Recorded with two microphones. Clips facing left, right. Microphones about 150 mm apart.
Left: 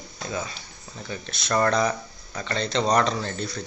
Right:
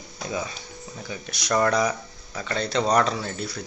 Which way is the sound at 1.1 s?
10° right (ahead or behind).